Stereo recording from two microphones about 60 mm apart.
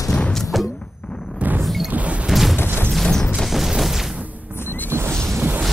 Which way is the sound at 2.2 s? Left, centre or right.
Centre.